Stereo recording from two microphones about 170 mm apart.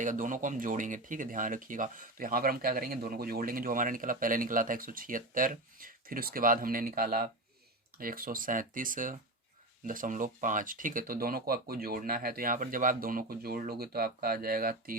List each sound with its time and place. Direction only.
0.0 s speech: 50° right (ahead or behind)